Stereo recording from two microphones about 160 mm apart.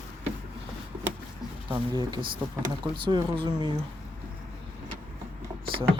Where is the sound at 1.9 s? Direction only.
30° right (ahead or behind).